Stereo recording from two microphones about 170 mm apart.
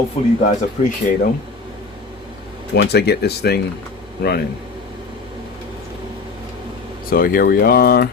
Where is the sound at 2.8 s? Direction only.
75° left (ahead or behind).